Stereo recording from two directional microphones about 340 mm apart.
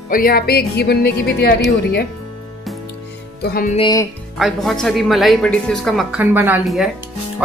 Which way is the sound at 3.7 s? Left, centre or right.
Centre.